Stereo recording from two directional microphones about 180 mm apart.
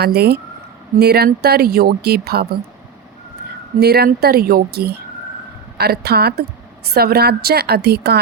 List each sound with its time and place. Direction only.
0.0 s speech: 60° right (ahead or behind)
3.8 s speech: 60° right (ahead or behind)